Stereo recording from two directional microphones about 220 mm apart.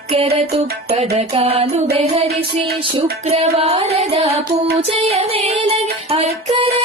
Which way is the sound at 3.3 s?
25° right (ahead or behind).